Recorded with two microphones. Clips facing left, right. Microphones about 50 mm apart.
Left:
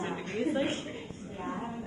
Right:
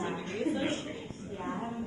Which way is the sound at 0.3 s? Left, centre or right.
Left.